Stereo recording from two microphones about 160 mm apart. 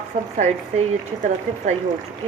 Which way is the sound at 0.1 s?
30° right (ahead or behind).